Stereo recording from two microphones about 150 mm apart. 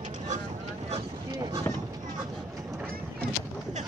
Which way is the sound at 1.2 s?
25° right (ahead or behind).